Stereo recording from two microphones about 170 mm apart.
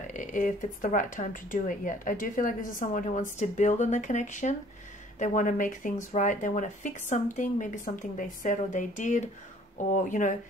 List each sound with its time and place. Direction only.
0.0 s speech: 45° left (ahead or behind)